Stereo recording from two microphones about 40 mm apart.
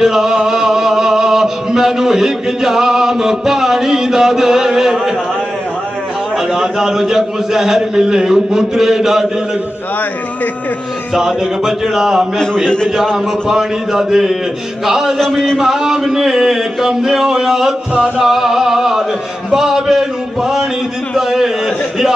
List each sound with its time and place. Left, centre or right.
0.0 s a man's voice: centre
6.5 s a man's voice: centre
11.1 s a man's voice: centre
15.1 s speech: centre
15.5 s a man's voice: centre
17.9 s music: right
18.2 s a man's voice: centre
19.5 s a sound: centre